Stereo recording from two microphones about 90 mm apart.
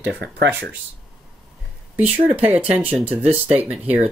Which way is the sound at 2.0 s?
90° right.